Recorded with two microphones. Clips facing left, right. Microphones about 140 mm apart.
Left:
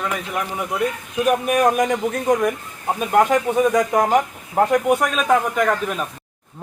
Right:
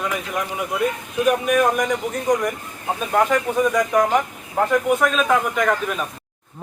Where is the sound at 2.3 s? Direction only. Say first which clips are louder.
Left 2 dB; 50° left (ahead or behind).